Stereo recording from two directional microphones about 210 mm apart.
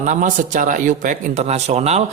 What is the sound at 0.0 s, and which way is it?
Speech, 35° right (ahead or behind).